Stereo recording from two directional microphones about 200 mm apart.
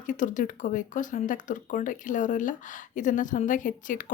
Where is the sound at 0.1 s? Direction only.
40° left (ahead or behind).